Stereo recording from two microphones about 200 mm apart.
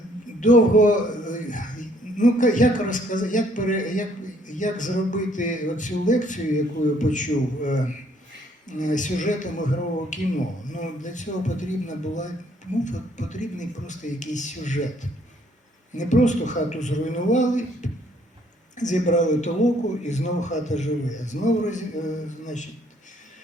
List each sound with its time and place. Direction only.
0.3 s a man's voice: 40° left (ahead or behind)
16.0 s a man's voice: 40° left (ahead or behind)